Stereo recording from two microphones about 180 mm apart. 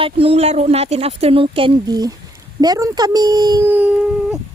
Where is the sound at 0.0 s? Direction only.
30° right (ahead or behind).